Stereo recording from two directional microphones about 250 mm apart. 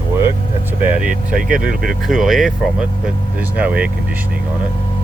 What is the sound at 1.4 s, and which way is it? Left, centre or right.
Speech, right.